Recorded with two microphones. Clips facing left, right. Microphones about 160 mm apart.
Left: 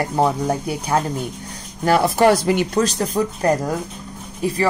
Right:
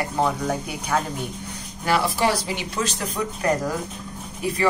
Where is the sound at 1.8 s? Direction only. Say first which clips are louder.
Left 7 dB; 45° left (ahead or behind).